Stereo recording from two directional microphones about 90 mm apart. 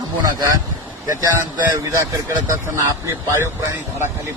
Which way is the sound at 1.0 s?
35° right (ahead or behind).